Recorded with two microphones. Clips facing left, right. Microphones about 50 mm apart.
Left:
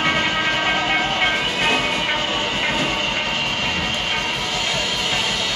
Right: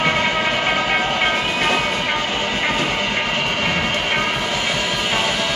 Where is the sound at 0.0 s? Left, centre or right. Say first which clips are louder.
Right 1 dB; centre.